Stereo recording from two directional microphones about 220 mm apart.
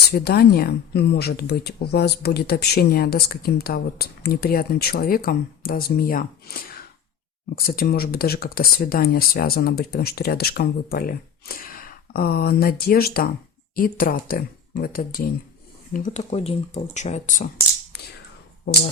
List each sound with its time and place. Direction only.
0.1 s speech: 45° left (ahead or behind)